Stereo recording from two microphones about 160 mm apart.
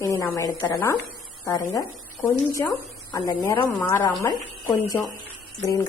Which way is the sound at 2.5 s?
25° left (ahead or behind).